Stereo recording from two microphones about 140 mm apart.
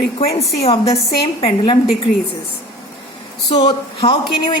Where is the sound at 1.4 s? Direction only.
40° left (ahead or behind).